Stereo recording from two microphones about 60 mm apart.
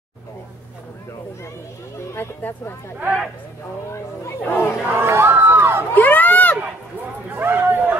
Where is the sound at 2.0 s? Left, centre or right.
Left.